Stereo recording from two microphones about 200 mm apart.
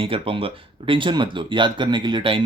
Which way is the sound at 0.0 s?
25° right (ahead or behind).